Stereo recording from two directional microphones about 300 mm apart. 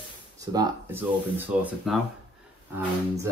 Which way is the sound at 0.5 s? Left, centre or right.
Centre.